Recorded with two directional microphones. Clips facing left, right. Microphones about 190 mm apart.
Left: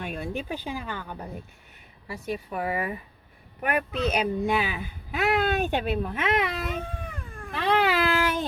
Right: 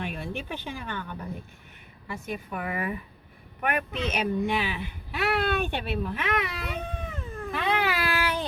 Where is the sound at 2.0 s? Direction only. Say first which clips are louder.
Left 2 dB; 35° left (ahead or behind).